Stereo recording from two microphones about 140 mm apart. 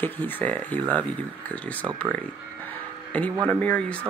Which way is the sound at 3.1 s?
10° left (ahead or behind).